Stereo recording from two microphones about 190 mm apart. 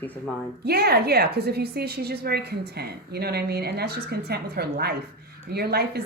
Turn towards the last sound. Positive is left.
turn(degrees=-55)  # may be behind; listen again after turning